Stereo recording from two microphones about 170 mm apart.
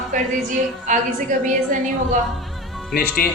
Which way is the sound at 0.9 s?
45° right (ahead or behind).